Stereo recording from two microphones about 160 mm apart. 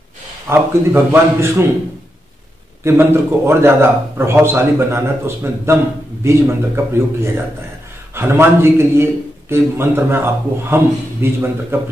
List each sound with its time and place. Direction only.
0.5 s a man's voice: 15° right (ahead or behind)
2.8 s a man's voice: 15° right (ahead or behind)